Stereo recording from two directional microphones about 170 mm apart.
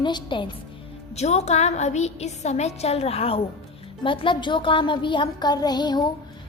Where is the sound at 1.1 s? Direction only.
40° left (ahead or behind).